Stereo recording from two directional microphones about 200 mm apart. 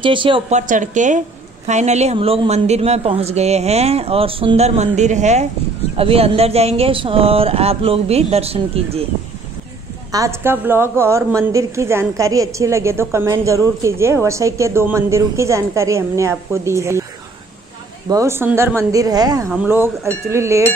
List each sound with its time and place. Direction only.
0.0 s speech: 25° right (ahead or behind)
10.1 s a woman's voice: 15° right (ahead or behind)
18.0 s a woman's voice: 15° right (ahead or behind)